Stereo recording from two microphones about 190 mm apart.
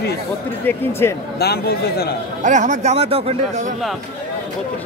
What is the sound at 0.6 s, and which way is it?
Speech, 15° left (ahead or behind).